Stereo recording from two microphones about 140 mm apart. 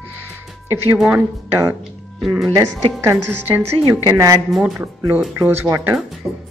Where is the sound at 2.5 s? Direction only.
30° right (ahead or behind).